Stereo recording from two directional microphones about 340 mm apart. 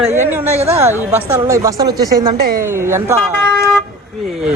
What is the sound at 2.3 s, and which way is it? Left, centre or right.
Speech, right.